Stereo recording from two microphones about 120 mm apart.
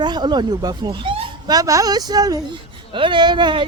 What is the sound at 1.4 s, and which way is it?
Speech, 30° right (ahead or behind).